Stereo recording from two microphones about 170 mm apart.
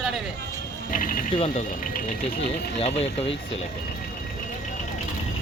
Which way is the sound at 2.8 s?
35° left (ahead or behind).